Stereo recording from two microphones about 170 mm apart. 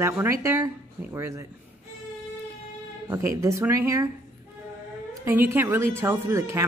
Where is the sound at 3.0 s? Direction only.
20° right (ahead or behind).